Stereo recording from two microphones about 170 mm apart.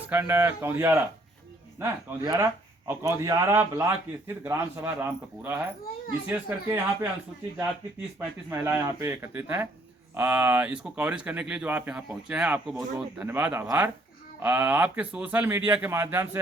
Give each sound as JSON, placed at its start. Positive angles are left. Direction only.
{"t": 0.1, "sound": "speech", "side_deg": -10}
{"t": 8.4, "sound": "speech", "side_deg": -15}